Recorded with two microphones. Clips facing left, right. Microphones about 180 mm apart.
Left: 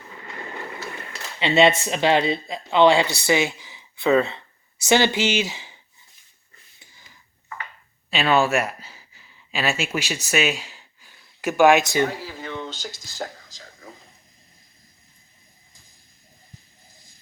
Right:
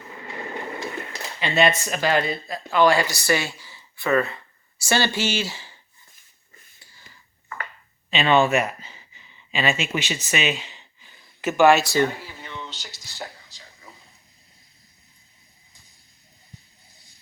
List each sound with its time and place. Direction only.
1.4 s speech: 25° left (ahead or behind)
8.1 s speech: 5° left (ahead or behind)
12.2 s a sound: 45° left (ahead or behind)